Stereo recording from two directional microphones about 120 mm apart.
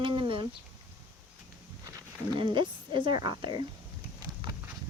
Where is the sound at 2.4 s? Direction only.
40° right (ahead or behind).